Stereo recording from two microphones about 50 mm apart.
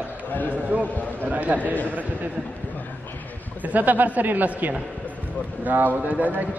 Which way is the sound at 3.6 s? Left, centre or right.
Right.